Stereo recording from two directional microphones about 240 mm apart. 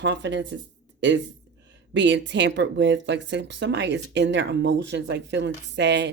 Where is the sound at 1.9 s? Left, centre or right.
Right.